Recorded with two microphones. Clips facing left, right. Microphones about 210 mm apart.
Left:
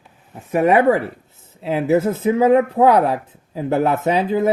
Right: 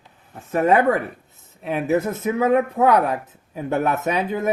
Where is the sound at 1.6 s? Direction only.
25° left (ahead or behind).